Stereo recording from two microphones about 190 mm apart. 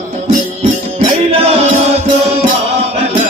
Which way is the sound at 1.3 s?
35° right (ahead or behind).